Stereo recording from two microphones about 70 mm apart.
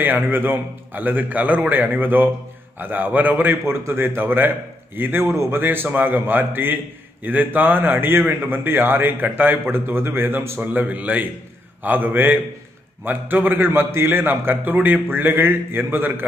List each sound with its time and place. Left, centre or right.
0.0 s a man's voice: right
5.3 s a man's voice: right
5.6 s a man's voice: right
10.6 s a man's voice: right